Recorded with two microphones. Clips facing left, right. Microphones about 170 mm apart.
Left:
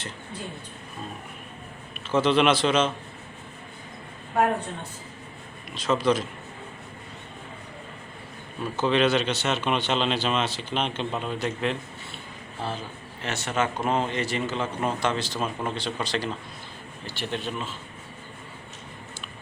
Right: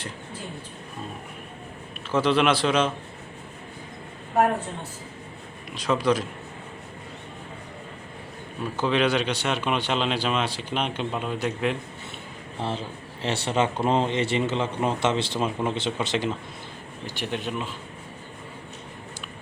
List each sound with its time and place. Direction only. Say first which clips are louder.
2.0 s speech: left 1 dB; 5° right (ahead or behind)
5.7 s speech: even; 10° right (ahead or behind)
8.7 s speech: left 1 dB; 10° right (ahead or behind)
12.5 s speech: right 3 dB; 25° right (ahead or behind)